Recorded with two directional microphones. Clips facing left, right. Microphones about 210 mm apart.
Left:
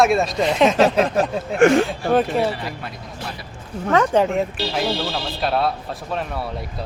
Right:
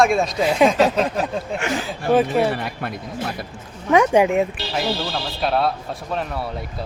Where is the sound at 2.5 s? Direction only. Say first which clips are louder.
Right 3 dB; 55° right (ahead or behind).